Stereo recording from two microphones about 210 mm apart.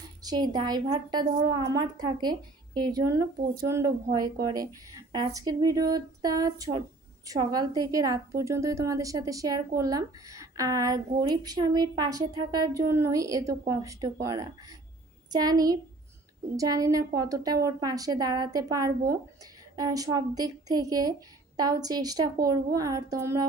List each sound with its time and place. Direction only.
0.2 s a woman's voice: 20° right (ahead or behind)